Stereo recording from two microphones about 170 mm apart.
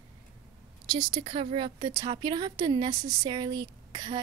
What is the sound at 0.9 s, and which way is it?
Speech, 30° right (ahead or behind).